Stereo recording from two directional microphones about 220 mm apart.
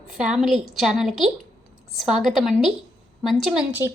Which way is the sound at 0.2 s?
Centre (ahead or behind).